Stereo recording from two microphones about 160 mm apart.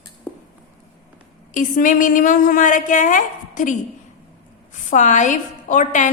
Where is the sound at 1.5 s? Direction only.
55° left (ahead or behind).